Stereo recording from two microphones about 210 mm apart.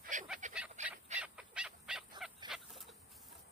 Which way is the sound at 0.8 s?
35° right (ahead or behind).